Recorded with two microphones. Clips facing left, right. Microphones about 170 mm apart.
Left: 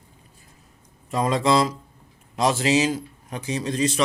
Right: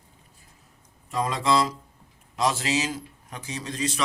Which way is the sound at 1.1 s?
20° left (ahead or behind).